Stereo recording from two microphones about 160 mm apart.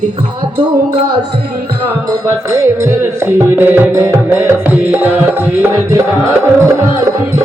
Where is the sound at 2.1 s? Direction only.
20° right (ahead or behind).